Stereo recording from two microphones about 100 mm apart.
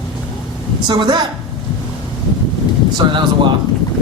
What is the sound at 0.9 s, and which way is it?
Speech, 50° right (ahead or behind).